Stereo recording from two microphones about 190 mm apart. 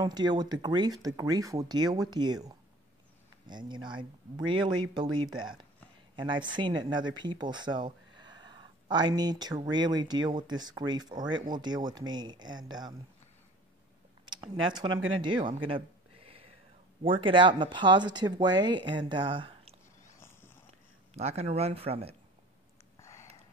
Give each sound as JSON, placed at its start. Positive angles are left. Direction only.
{"t": 0.0, "sound": "speech", "side_deg": -20}
{"t": 14.2, "sound": "speech", "side_deg": -25}
{"t": 15.0, "sound": "speech", "side_deg": -90}
{"t": 15.2, "sound": "a sound", "side_deg": -25}
{"t": 17.0, "sound": "speech", "side_deg": -25}
{"t": 21.1, "sound": "speech", "side_deg": -35}